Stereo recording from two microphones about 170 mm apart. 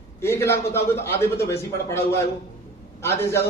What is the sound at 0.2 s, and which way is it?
A man's voice, 15° left (ahead or behind).